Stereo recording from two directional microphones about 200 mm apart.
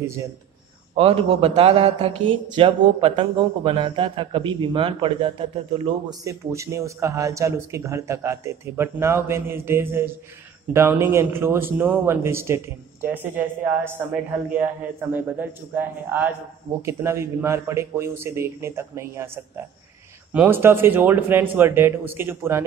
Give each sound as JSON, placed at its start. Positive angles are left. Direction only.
{"t": 0.0, "sound": "a man's voice", "side_deg": -15}
{"t": 0.9, "sound": "a man's voice", "side_deg": -30}